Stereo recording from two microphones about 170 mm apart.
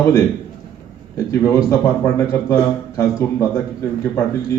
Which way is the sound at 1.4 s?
15° left (ahead or behind).